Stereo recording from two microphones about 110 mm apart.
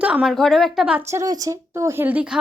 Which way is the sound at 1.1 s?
30° right (ahead or behind).